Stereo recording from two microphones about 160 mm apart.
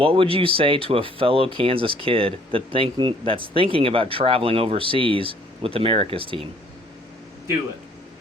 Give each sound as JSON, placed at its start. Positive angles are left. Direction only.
{"t": 0.0, "sound": "speech", "side_deg": -35}